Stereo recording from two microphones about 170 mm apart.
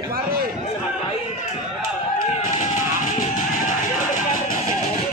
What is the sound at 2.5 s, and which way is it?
Music, 45° left (ahead or behind).